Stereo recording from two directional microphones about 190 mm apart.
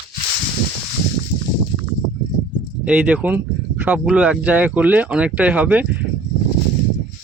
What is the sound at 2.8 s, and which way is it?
Speech, 5° right (ahead or behind).